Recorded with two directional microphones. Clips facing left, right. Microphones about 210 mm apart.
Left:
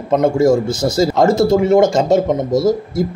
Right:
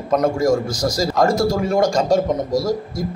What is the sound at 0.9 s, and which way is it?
Speech, 25° left (ahead or behind).